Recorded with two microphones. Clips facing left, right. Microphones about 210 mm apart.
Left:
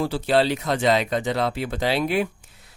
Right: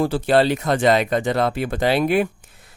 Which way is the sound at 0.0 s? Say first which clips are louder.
Right 3 dB; 50° right (ahead or behind).